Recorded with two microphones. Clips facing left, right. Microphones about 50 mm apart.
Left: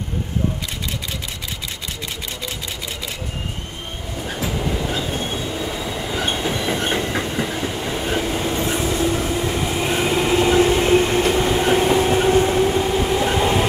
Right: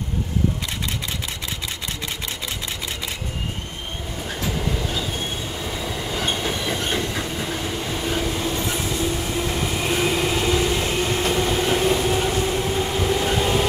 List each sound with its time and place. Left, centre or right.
4.2 s train: centre
4.9 s train: left
5.6 s train: centre
7.1 s train: left
7.4 s train: centre
8.8 s train: left
9.7 s vehicle: centre
10.6 s train: left
11.2 s train: centre
12.8 s train: centre